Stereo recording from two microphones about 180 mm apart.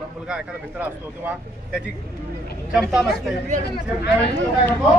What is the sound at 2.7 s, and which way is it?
Speech, 5° right (ahead or behind).